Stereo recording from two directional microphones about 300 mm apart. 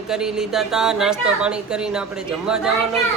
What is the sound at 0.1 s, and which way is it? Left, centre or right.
A woman's voice, centre.